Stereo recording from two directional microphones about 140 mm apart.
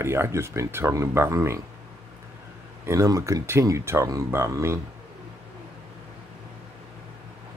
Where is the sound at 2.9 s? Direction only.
20° right (ahead or behind).